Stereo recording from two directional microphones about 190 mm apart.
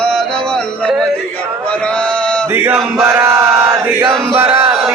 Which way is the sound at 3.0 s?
15° right (ahead or behind).